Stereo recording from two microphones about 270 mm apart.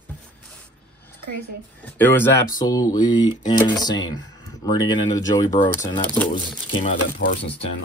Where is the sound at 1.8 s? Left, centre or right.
Centre.